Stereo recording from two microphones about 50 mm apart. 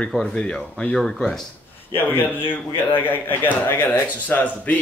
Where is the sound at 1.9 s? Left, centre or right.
Left.